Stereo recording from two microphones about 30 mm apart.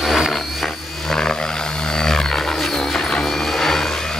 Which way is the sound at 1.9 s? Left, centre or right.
Centre.